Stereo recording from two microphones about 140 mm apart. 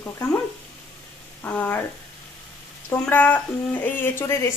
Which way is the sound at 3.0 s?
10° left (ahead or behind).